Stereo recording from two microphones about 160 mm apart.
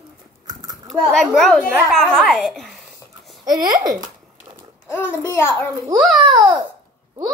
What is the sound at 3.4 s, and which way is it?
Speech, 25° right (ahead or behind).